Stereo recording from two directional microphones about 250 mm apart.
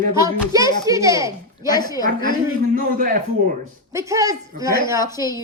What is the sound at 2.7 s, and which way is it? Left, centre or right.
Speech, right.